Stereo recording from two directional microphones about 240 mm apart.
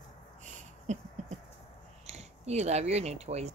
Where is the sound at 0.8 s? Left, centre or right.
Right.